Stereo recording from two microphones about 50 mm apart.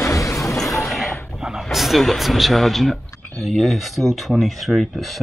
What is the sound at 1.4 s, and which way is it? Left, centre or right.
Speech, centre.